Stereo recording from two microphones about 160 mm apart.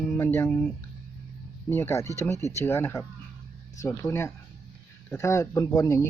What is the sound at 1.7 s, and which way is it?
Speech, 15° left (ahead or behind).